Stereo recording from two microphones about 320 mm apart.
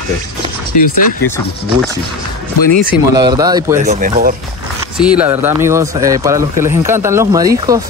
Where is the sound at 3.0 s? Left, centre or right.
Centre.